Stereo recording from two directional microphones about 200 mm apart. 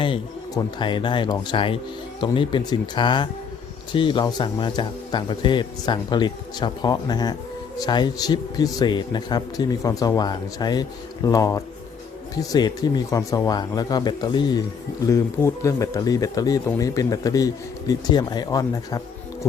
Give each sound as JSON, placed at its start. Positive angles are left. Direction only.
{"t": 0.0, "sound": "speech", "side_deg": 25}